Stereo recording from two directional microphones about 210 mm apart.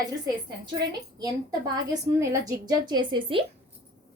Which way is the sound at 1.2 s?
20° right (ahead or behind).